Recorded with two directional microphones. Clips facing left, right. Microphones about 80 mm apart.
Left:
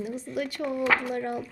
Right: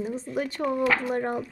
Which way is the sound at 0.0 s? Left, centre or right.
Right.